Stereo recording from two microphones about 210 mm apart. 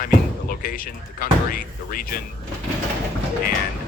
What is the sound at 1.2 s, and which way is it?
Speech, 45° left (ahead or behind).